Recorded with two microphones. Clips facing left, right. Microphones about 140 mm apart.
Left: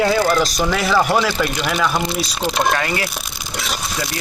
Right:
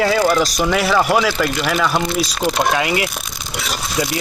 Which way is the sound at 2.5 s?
10° right (ahead or behind).